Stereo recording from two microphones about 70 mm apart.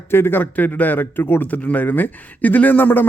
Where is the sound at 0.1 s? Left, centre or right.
Left.